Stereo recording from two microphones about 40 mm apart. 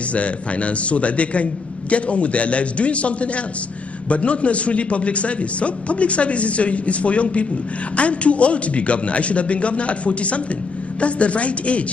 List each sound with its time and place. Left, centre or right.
0.1 s a man's voice: left